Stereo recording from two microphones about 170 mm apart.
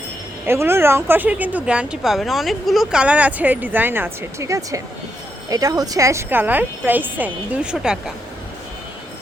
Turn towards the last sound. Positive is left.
turn(degrees=-5)  # may be behind; listen again after turning